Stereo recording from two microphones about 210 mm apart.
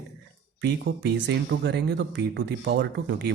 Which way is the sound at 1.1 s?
55° right (ahead or behind).